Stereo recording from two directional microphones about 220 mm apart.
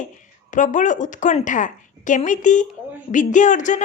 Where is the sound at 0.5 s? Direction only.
35° left (ahead or behind).